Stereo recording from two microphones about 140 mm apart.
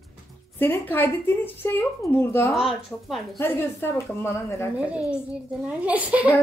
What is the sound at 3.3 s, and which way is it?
A woman's voice, 15° left (ahead or behind).